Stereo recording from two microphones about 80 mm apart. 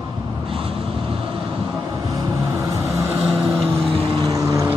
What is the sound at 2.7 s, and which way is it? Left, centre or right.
Vehicle, right.